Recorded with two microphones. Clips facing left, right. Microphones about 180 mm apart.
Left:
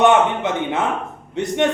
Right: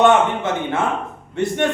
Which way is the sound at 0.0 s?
20° left (ahead or behind).